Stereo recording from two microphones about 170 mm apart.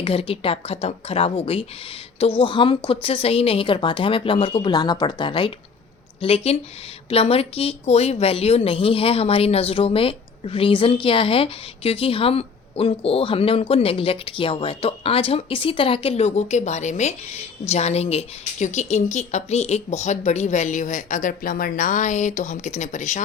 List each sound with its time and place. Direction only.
0.0 s a woman's voice: 35° left (ahead or behind)